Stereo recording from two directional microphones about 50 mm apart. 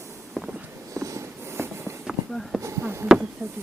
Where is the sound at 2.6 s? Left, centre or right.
Right.